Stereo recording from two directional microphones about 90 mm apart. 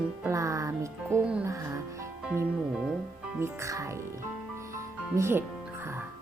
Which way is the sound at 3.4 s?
35° right (ahead or behind).